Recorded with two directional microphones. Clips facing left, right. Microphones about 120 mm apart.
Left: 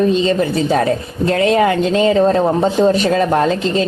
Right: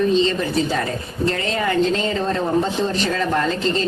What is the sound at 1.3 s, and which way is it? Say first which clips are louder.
Speech: left 13 dB; 65° left (ahead or behind).